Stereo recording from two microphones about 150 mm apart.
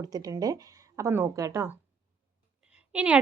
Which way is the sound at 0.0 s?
25° right (ahead or behind).